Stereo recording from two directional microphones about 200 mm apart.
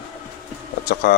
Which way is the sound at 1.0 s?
50° left (ahead or behind).